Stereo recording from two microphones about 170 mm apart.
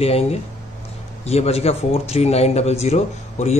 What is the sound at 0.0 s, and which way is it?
Speech, 35° left (ahead or behind).